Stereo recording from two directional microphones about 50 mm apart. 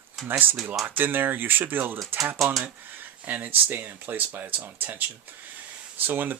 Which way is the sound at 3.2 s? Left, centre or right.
Right.